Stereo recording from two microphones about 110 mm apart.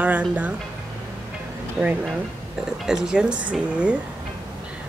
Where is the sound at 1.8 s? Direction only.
15° right (ahead or behind).